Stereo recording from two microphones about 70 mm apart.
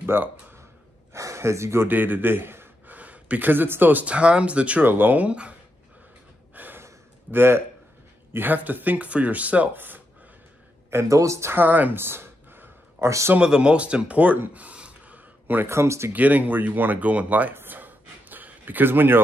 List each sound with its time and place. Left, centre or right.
0.0 s speech: right
1.1 s speech: right
1.9 s a man's voice: right
3.0 s speech: right
4.8 s speech: right
6.5 s gasp: right
7.2 s speech: right
10.9 s speech: right
11.5 s a sound: right
13.4 s speech: centre
15.4 s speech: right
15.7 s speech: right
16.1 s speech: right
17.6 s gasp: right